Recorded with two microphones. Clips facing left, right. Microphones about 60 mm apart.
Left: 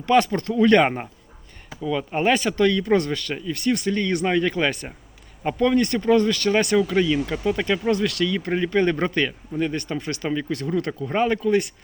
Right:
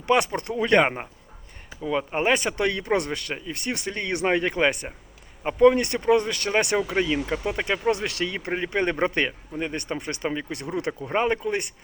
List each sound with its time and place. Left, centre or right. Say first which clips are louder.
0.0 s speech: left 3 dB; right